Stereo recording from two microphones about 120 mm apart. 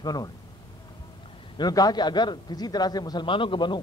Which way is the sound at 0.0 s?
35° left (ahead or behind).